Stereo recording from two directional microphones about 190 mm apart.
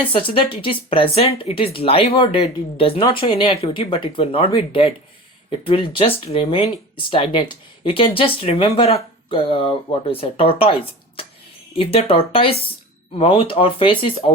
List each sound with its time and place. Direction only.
0.0 s speech: 30° left (ahead or behind)
11.8 s speech: 30° left (ahead or behind)